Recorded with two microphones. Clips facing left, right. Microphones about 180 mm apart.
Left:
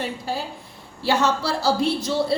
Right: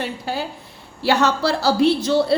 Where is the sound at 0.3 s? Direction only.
70° right (ahead or behind).